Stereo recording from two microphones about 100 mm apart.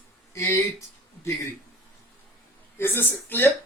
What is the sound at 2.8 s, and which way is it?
Speech, 20° left (ahead or behind).